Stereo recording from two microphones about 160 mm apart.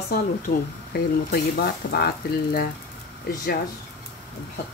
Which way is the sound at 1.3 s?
75° left (ahead or behind).